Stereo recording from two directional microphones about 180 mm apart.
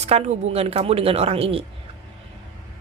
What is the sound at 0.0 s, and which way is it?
A woman's voice, 35° right (ahead or behind).